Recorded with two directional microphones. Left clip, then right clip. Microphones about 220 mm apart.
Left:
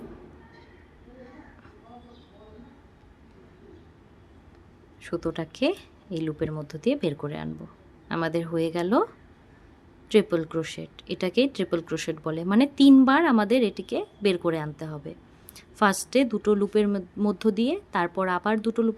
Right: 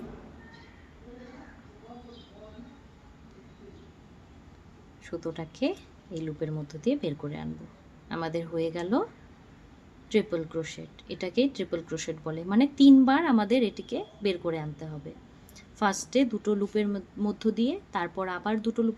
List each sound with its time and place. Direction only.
5.0 s speech: 35° left (ahead or behind)
10.1 s speech: 30° left (ahead or behind)